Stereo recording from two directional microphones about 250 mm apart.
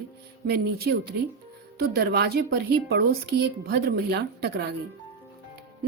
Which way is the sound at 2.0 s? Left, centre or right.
Right.